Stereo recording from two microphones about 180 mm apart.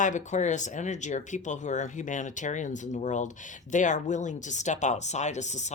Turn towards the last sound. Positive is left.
turn(degrees=40)  # may be behind; listen again after turning